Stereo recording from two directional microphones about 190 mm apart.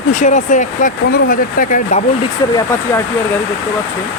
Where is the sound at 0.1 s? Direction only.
40° left (ahead or behind).